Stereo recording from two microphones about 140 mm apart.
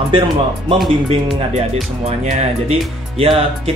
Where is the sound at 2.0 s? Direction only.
50° right (ahead or behind).